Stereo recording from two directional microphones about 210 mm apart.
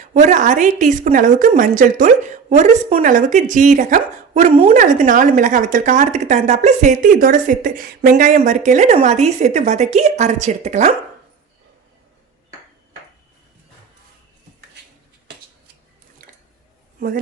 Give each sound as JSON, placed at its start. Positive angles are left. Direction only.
{"t": 0.0, "sound": "a woman's voice", "side_deg": -35}